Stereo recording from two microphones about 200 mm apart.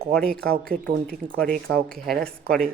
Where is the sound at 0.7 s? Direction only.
30° right (ahead or behind).